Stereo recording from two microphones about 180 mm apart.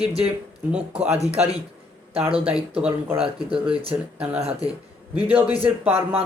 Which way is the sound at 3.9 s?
5° right (ahead or behind).